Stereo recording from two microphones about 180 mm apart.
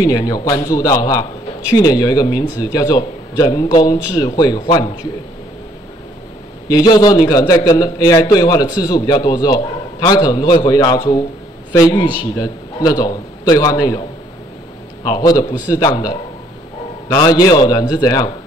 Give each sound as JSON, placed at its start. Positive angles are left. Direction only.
{"t": 0.0, "sound": "a man's voice", "side_deg": 20}
{"t": 6.7, "sound": "a man's voice", "side_deg": 20}
{"t": 15.0, "sound": "a man's voice", "side_deg": 20}